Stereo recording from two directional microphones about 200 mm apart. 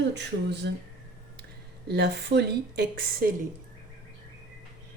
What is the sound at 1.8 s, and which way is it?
Speech, 55° right (ahead or behind).